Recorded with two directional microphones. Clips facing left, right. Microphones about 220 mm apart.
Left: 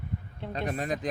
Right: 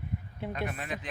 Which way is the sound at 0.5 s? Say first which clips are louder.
Left 7 dB; 35° left (ahead or behind).